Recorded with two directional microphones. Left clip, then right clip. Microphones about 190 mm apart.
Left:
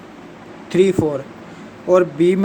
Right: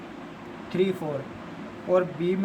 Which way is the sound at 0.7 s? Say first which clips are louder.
Left 11 dB; 55° left (ahead or behind).